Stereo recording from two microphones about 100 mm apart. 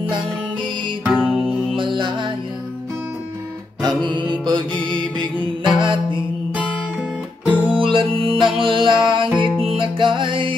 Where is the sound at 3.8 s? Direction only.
50° right (ahead or behind).